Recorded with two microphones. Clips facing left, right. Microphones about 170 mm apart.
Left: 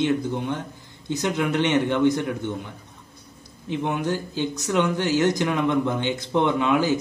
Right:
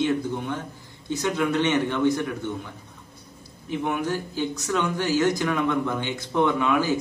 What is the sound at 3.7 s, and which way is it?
Speech, 20° left (ahead or behind).